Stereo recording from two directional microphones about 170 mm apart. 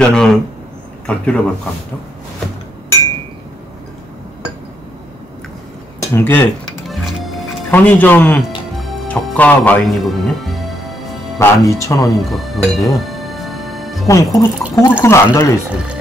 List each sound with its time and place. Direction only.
0.0 s speech: 5° left (ahead or behind)
5.9 s speech: 15° left (ahead or behind)
6.9 s music: centre (ahead or behind)
7.7 s speech: 10° left (ahead or behind)
8.7 s music: 5° left (ahead or behind)
11.3 s speech: 15° left (ahead or behind)
12.2 s speech: centre (ahead or behind)
12.9 s music: centre (ahead or behind)
14.0 s speech: 20° left (ahead or behind)
15.7 s speech: 5° right (ahead or behind)